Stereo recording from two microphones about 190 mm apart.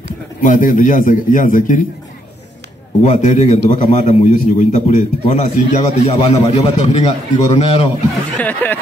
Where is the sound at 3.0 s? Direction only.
40° left (ahead or behind).